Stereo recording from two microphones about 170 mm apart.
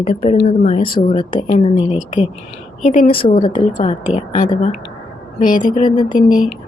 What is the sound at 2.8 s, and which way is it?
Speech, 50° left (ahead or behind).